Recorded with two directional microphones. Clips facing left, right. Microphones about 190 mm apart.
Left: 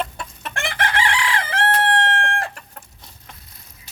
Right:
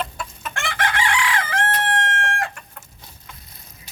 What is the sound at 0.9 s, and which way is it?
Chicken, 35° left (ahead or behind).